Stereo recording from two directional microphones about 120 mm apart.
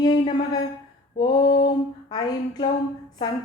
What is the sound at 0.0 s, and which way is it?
Speech, 35° left (ahead or behind).